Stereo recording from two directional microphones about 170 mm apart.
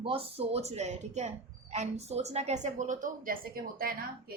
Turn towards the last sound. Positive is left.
turn(degrees=-60)  # may be behind; listen again after turning